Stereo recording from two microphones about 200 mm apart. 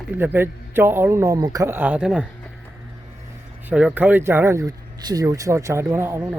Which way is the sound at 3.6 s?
5° right (ahead or behind).